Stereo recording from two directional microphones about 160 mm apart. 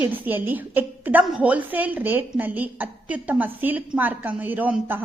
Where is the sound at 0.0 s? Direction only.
10° right (ahead or behind).